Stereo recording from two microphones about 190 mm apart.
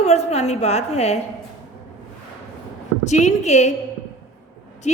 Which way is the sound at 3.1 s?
40° left (ahead or behind).